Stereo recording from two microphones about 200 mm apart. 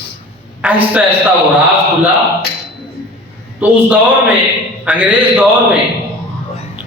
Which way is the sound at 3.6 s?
10° right (ahead or behind).